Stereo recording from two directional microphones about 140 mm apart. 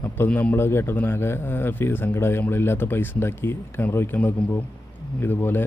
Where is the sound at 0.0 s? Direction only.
15° left (ahead or behind).